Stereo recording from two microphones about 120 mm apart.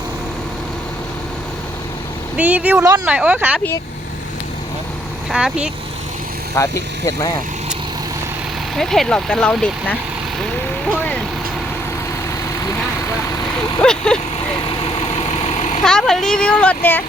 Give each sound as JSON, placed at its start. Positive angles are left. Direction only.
{"t": 2.3, "sound": "speech", "side_deg": -10}
{"t": 2.8, "sound": "speech", "side_deg": -30}
{"t": 3.1, "sound": "speech", "side_deg": -15}
{"t": 5.3, "sound": "speech", "side_deg": -5}
{"t": 6.5, "sound": "speech", "side_deg": 25}
{"t": 8.7, "sound": "speech", "side_deg": 5}
{"t": 13.8, "sound": "speech", "side_deg": 5}
{"t": 15.3, "sound": "vehicle", "side_deg": 60}
{"t": 15.8, "sound": "speech", "side_deg": 5}